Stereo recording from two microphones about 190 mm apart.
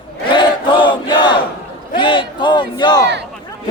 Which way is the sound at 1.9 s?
25° left (ahead or behind).